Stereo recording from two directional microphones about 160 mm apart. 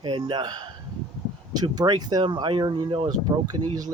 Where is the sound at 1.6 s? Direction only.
25° right (ahead or behind).